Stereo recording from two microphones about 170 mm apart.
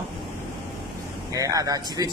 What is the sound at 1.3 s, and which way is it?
Speech, 20° right (ahead or behind).